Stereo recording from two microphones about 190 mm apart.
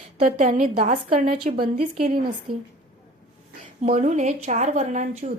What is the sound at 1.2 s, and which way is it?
Speech, 45° right (ahead or behind).